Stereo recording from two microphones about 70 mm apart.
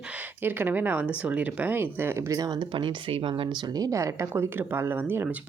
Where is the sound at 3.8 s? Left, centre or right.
Right.